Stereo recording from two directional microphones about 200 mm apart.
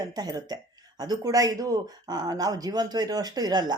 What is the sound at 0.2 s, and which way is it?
Speech, 20° right (ahead or behind).